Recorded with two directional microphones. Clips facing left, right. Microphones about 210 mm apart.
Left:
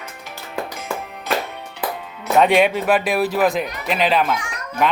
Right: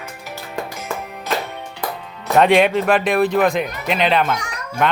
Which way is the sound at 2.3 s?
5° left (ahead or behind).